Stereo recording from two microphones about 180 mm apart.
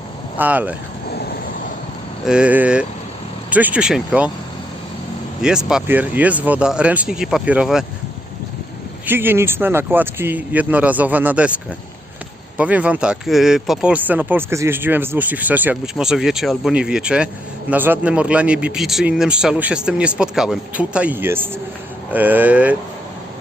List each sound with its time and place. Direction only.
0.3 s speech: 10° right (ahead or behind)
1.1 s vehicle: 60° left (ahead or behind)
2.2 s speech: 5° right (ahead or behind)
5.4 s speech: 5° right (ahead or behind)
9.0 s speech: 10° right (ahead or behind)
12.5 s speech: 5° right (ahead or behind)